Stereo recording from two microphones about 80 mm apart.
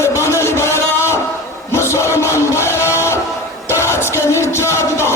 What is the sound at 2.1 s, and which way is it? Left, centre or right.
Music, left.